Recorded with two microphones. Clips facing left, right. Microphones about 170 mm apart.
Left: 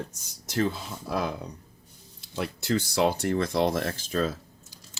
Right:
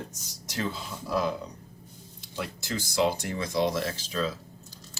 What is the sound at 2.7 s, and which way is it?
Speech, 60° left (ahead or behind).